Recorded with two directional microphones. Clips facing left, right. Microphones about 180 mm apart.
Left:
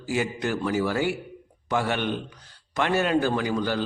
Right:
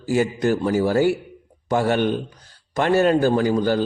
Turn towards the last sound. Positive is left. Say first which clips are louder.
# right 7 dB
turn(degrees=-40)  # may be behind; listen again after turning